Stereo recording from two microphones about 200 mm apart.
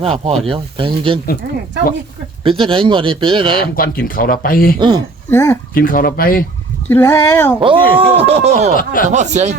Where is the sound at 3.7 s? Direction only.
45° left (ahead or behind).